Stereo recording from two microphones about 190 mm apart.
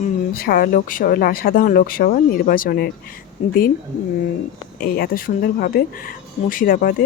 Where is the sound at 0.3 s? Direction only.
50° left (ahead or behind).